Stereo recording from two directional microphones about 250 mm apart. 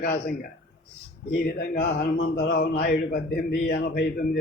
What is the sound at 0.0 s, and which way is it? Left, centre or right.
Speech, left.